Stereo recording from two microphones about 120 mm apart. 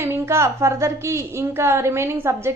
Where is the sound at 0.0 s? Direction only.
20° right (ahead or behind).